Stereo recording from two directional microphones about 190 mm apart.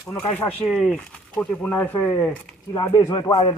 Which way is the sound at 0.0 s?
15° left (ahead or behind).